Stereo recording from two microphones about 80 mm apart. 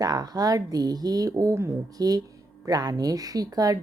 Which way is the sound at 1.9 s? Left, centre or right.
Right.